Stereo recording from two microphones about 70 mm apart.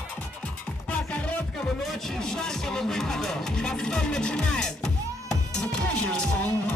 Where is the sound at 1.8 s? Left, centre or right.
Centre.